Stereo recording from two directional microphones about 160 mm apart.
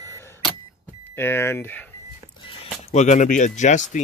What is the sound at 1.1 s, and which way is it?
Speech, 15° left (ahead or behind).